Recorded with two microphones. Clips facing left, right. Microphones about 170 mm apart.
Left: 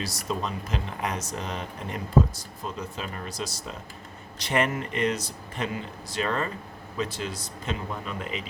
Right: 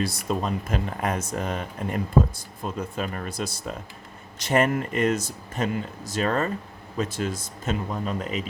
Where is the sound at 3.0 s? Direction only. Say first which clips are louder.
Right 5 dB; 55° right (ahead or behind).